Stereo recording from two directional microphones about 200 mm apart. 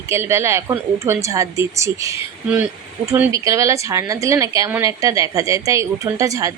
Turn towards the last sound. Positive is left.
turn(degrees=-15)  # may be behind; listen again after turning